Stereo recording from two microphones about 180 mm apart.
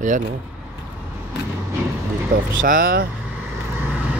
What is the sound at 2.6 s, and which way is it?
Speech, 50° right (ahead or behind).